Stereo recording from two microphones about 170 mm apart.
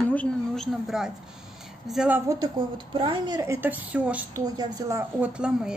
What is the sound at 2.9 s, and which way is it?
Speech, 30° right (ahead or behind).